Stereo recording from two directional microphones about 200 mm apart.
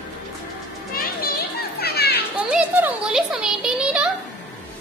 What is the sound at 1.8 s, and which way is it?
Children playing, 55° left (ahead or behind).